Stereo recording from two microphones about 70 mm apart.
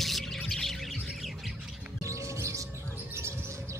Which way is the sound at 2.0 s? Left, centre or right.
Right.